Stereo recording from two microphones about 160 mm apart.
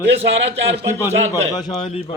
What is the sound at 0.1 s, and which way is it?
Speech, 40° right (ahead or behind).